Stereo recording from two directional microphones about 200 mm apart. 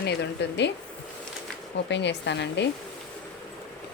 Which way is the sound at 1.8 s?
60° left (ahead or behind).